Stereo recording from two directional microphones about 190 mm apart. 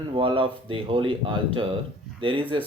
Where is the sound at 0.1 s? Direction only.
30° right (ahead or behind).